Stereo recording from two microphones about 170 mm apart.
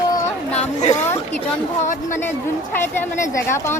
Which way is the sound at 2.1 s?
15° left (ahead or behind).